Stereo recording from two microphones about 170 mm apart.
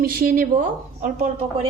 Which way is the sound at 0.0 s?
60° right (ahead or behind).